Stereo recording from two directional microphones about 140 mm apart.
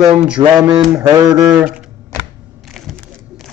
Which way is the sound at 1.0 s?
30° right (ahead or behind).